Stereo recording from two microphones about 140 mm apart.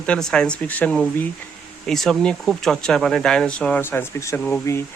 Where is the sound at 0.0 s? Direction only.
5° left (ahead or behind).